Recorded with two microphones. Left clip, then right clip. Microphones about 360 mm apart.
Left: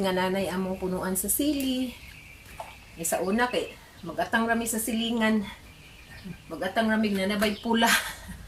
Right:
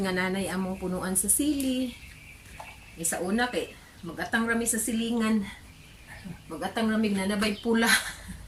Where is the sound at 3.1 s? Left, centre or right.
Centre.